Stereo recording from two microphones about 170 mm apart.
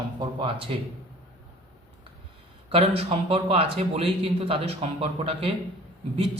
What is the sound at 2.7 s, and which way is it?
A man's voice, 35° right (ahead or behind).